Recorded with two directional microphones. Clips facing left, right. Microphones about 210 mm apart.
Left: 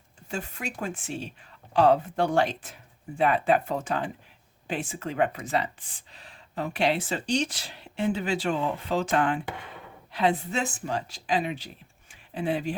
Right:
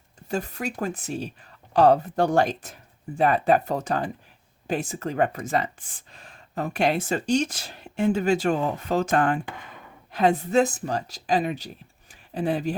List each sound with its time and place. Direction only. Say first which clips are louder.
0.3 s speech: right 6 dB; 40° right (ahead or behind)